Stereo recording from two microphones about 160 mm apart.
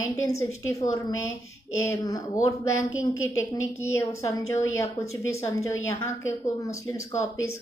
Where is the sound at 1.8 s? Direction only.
20° left (ahead or behind).